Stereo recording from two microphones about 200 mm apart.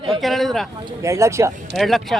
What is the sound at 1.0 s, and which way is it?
Speech, 15° right (ahead or behind).